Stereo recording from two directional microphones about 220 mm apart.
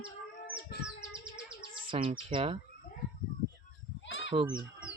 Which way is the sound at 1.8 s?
25° right (ahead or behind).